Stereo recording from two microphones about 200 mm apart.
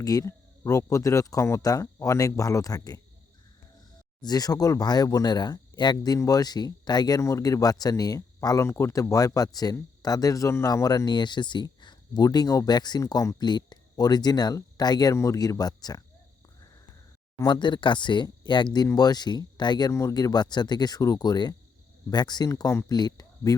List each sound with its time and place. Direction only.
0.0 s speech: 15° left (ahead or behind)
4.2 s speech: 20° left (ahead or behind)
17.3 s speech: 25° left (ahead or behind)